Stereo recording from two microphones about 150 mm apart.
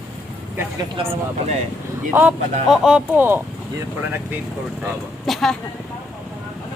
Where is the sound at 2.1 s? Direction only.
10° right (ahead or behind).